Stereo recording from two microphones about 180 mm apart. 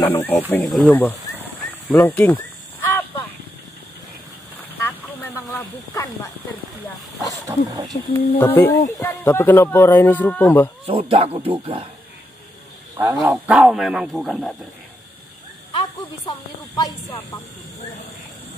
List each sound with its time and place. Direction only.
0.0 s speech: 10° left (ahead or behind)
1.9 s a sound: 10° left (ahead or behind)
4.7 s a sound: 10° left (ahead or behind)
5.5 s speech: 20° left (ahead or behind)
7.4 s speech: 20° right (ahead or behind)
8.1 s speech: 10° left (ahead or behind)
10.9 s speech: 30° right (ahead or behind)
13.5 s speech: 5° right (ahead or behind)
15.7 s speech: 25° left (ahead or behind)